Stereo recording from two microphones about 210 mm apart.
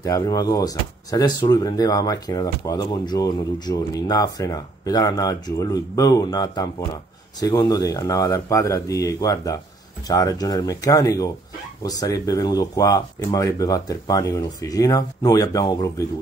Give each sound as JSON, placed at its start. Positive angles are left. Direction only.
{"t": 0.0, "sound": "speech", "side_deg": 15}